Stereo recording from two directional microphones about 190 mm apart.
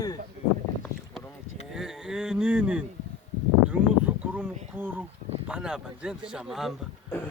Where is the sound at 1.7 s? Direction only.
5° right (ahead or behind).